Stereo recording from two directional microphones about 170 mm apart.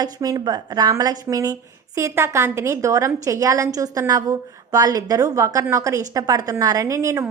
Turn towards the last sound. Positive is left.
turn(degrees=-20)  # may be behind; listen again after turning